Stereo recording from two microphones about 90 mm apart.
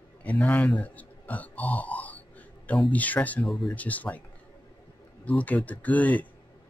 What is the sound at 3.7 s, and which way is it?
Speech, 15° left (ahead or behind).